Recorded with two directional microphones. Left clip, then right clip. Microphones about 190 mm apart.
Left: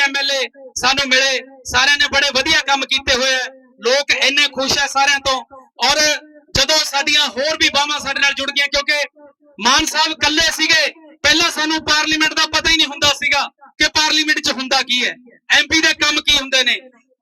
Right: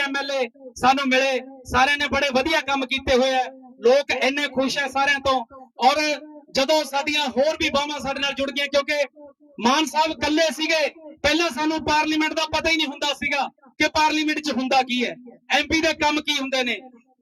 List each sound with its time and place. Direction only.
0.0 s a man's voice: 55° right (ahead or behind)